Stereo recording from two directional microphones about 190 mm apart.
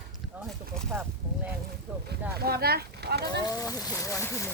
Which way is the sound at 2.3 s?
55° right (ahead or behind).